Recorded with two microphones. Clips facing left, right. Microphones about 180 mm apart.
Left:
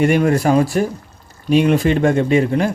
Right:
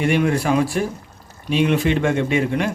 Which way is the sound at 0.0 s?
45° left (ahead or behind).